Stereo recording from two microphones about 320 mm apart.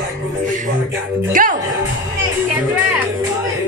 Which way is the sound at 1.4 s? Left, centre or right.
Right.